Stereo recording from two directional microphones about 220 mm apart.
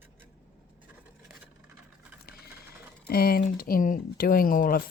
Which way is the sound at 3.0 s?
45° left (ahead or behind).